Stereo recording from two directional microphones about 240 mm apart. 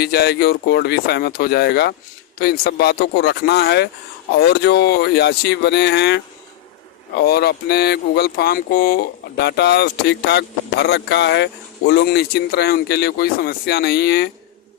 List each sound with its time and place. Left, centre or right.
0.0 s speech: left